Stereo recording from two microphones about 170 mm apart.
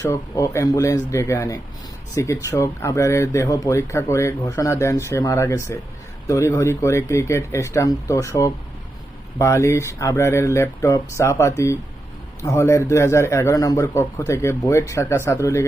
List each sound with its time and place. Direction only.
0.0 s speech: 20° left (ahead or behind)